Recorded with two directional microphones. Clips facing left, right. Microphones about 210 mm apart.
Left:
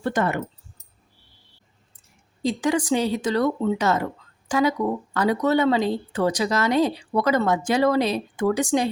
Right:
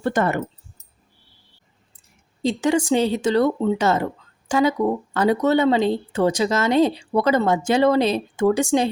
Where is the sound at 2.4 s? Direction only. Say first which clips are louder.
Right 3 dB; 25° right (ahead or behind).